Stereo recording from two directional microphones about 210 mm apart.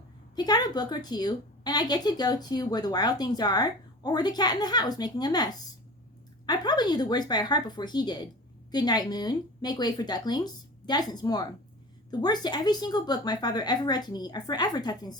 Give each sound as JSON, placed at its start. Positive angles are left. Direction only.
{"t": 0.3, "sound": "a woman's voice", "side_deg": 20}